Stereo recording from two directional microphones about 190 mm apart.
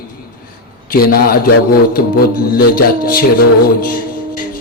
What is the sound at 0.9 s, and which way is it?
Mantra, 55° left (ahead or behind).